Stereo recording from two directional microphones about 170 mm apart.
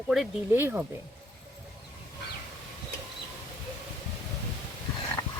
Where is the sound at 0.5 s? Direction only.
10° right (ahead or behind).